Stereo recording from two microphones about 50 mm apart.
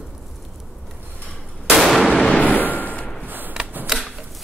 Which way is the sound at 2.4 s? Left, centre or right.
Left.